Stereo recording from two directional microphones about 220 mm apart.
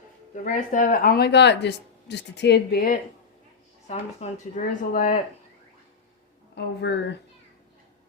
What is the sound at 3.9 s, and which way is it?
Speech, 35° left (ahead or behind).